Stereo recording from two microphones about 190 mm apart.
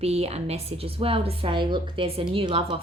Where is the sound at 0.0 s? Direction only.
35° right (ahead or behind).